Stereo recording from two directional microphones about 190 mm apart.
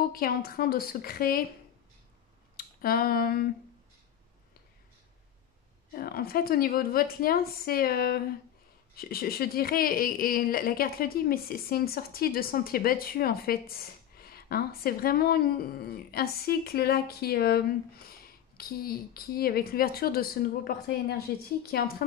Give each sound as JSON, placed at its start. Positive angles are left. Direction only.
{"t": 0.1, "sound": "speech", "side_deg": 50}
{"t": 2.5, "sound": "speech", "side_deg": 50}
{"t": 5.9, "sound": "speech", "side_deg": 50}